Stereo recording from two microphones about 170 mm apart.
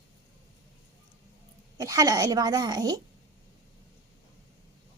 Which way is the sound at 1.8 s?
20° right (ahead or behind).